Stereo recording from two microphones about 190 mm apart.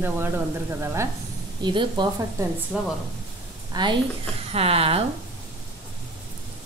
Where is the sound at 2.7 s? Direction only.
5° right (ahead or behind).